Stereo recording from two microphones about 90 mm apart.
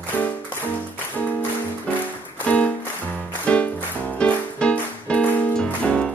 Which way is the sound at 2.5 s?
15° left (ahead or behind).